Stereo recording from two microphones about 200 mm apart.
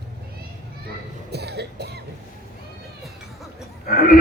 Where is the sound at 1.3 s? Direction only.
55° right (ahead or behind).